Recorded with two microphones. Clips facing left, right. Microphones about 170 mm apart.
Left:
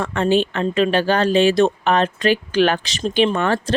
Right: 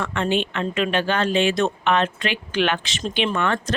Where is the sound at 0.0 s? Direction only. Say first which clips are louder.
Left 5 dB; 35° left (ahead or behind).